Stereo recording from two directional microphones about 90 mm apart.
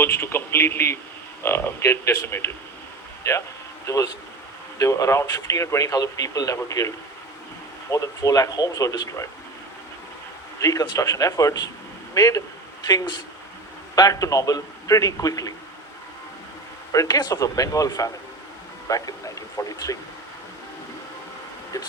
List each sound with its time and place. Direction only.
0.0 s speech: 25° left (ahead or behind)
10.6 s speech: 40° left (ahead or behind)
12.8 s speech: 50° left (ahead or behind)
16.9 s speech: 40° left (ahead or behind)